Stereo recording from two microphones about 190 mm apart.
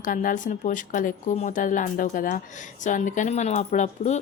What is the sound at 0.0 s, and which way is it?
Speech, 45° left (ahead or behind).